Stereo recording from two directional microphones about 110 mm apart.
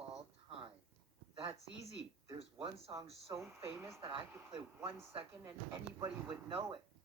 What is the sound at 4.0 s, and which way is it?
Speech, 50° right (ahead or behind).